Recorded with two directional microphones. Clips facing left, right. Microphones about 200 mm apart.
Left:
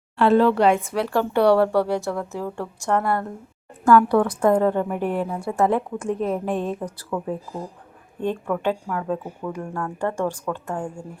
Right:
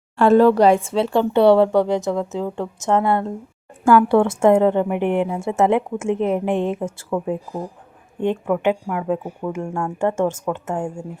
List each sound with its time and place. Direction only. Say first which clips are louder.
0.2 s a woman's voice: right 4 dB; 45° right (ahead or behind); by 9.2 s 15° right (ahead or behind)
9.4 s a woman's voice: right 4 dB; 25° right (ahead or behind)